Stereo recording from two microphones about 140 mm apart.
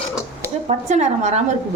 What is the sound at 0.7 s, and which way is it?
Speech, 55° right (ahead or behind).